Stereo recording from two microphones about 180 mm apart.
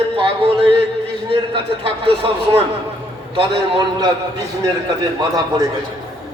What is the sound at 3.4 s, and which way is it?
A man's voice, 30° right (ahead or behind).